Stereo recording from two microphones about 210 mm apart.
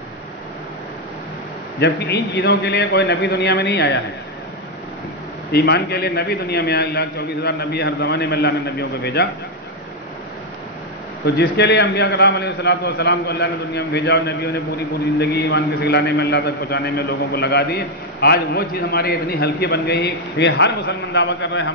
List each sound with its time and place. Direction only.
1.8 s a man's voice: 50° left (ahead or behind)
5.5 s a man's voice: 50° left (ahead or behind)
11.2 s a man's voice: 50° left (ahead or behind)